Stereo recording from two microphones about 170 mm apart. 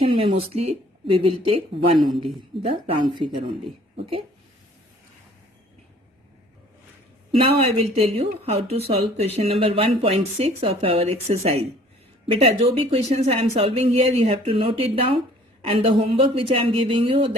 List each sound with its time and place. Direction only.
0.0 s speech: 35° right (ahead or behind)
7.6 s speech: 35° right (ahead or behind)